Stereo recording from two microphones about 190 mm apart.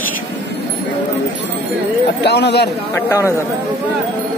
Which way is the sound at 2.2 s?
65° left (ahead or behind).